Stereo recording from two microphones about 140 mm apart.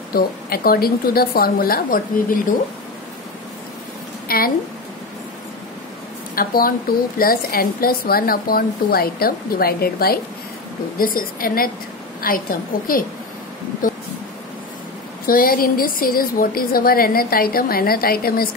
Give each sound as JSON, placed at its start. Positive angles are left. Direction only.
{"t": 0.1, "sound": "a woman's voice", "side_deg": 90}
{"t": 4.3, "sound": "a sound", "side_deg": 90}
{"t": 6.3, "sound": "a woman's voice", "side_deg": 90}
{"t": 15.2, "sound": "a woman's voice", "side_deg": 90}